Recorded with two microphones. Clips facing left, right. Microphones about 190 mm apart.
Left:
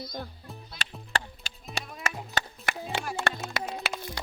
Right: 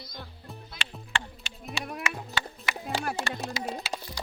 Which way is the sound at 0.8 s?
40° left (ahead or behind).